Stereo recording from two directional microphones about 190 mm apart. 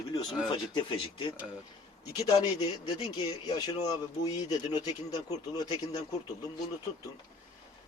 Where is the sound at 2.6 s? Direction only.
25° left (ahead or behind).